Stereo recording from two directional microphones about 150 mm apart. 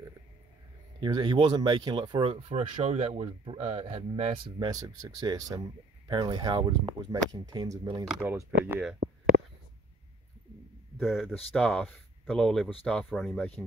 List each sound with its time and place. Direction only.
1.0 s speech: 30° right (ahead or behind)
4.6 s speech: 25° right (ahead or behind)
8.1 s speech: 10° right (ahead or behind)
11.0 s speech: centre (ahead or behind)